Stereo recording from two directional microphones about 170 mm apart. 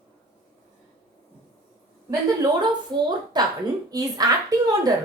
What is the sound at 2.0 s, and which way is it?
A woman's voice, 20° right (ahead or behind).